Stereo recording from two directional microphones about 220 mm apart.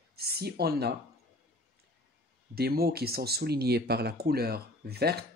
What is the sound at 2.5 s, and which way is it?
Speech, 45° right (ahead or behind).